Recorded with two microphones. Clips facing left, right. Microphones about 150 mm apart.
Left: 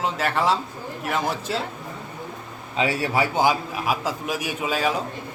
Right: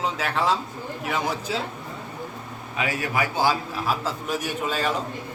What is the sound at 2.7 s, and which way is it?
Speech, 30° left (ahead or behind).